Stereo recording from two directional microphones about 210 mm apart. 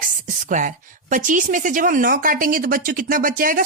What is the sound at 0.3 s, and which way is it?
Speech, 35° right (ahead or behind).